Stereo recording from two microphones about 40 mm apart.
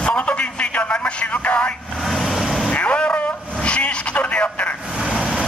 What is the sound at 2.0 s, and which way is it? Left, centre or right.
Vehicle, centre.